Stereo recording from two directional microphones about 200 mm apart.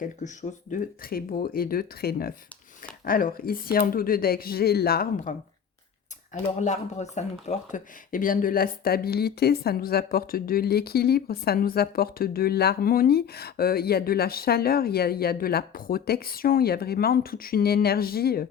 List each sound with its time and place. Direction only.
0.7 s speech: 45° left (ahead or behind)